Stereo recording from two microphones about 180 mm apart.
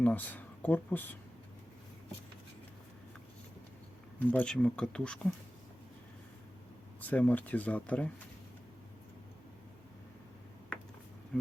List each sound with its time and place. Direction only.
0.0 s speech: 10° left (ahead or behind)
4.2 s speech: 10° left (ahead or behind)
7.0 s speech: 10° left (ahead or behind)